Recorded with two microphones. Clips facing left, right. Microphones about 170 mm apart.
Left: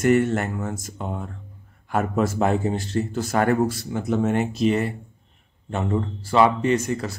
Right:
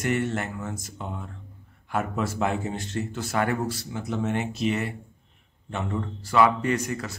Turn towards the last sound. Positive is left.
turn(degrees=25)  # may be behind; listen again after turning